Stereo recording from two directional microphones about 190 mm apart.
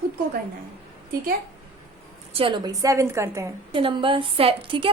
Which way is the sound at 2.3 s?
25° right (ahead or behind).